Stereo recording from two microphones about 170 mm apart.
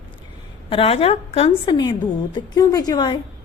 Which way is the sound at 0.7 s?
35° left (ahead or behind).